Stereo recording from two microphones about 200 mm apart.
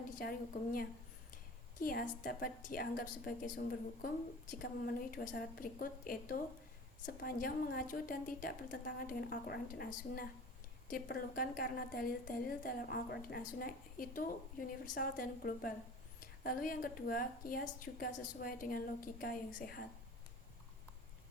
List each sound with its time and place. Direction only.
0.2 s a woman's voice: 45° left (ahead or behind)
5.1 s a woman's voice: 45° left (ahead or behind)